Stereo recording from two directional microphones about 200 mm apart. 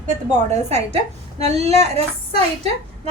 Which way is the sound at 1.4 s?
35° right (ahead or behind).